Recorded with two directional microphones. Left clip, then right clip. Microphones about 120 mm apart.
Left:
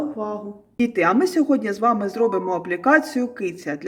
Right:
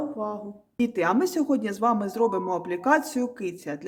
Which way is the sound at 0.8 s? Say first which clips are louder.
Left 5 dB; 30° right (ahead or behind).